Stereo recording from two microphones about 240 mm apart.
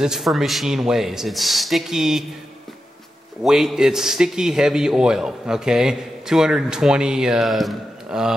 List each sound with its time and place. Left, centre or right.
0.0 s a man's voice: centre
3.4 s a man's voice: centre